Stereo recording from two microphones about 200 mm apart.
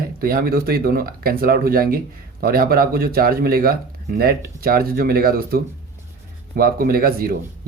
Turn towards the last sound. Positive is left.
turn(degrees=-50)  # may be behind; listen again after turning